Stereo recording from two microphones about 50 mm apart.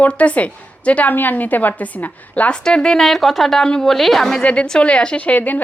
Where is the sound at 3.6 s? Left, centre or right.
Centre.